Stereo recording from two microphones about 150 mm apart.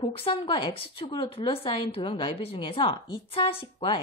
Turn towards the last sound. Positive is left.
turn(degrees=35)  # may be behind; listen again after turning